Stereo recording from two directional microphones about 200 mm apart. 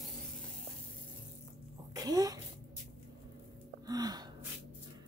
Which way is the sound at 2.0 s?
20° right (ahead or behind).